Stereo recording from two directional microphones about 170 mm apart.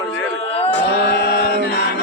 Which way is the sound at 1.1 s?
70° left (ahead or behind).